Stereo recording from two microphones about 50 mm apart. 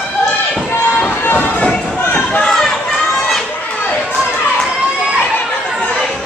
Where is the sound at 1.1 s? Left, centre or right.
Left.